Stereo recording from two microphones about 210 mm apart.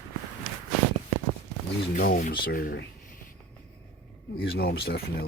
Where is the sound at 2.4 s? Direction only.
40° left (ahead or behind).